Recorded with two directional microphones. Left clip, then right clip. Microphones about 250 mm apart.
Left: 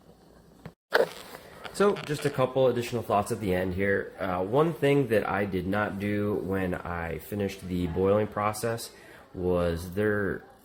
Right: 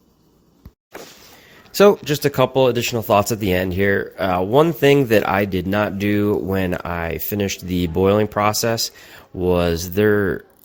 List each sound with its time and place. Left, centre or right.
1.8 s speech: right